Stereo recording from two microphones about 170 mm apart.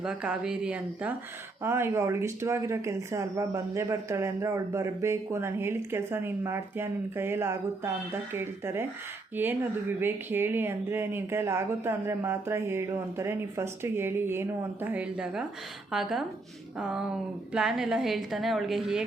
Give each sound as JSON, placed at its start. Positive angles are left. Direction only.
{"t": 0.0, "sound": "a woman's voice", "side_deg": -5}